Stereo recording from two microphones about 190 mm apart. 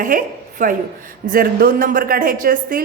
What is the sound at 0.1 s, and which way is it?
A woman's voice, 45° right (ahead or behind).